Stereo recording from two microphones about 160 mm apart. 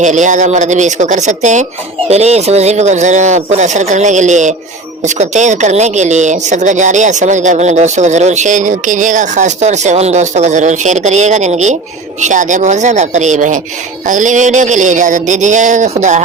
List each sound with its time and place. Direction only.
0.0 s a woman's voice: 50° right (ahead or behind)